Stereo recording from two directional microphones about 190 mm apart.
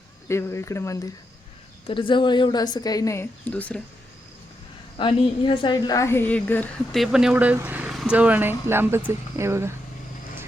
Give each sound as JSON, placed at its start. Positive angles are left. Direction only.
{"t": 0.3, "sound": "speech", "side_deg": 15}
{"t": 1.9, "sound": "a woman's voice", "side_deg": 25}
{"t": 4.9, "sound": "a woman's voice", "side_deg": 25}
{"t": 7.0, "sound": "speech", "side_deg": -5}